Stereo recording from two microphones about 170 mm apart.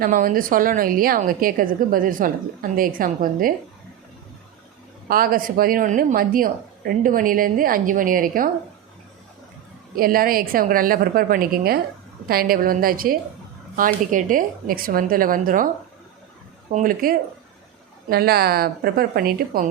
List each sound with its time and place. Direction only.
0.0 s a woman's voice: 50° right (ahead or behind)
5.0 s a woman's voice: 60° right (ahead or behind)
9.9 s a woman's voice: 60° right (ahead or behind)
16.7 s a woman's voice: 55° right (ahead or behind)